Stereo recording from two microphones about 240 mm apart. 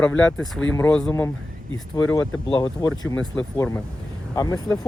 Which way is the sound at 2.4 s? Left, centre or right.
Centre.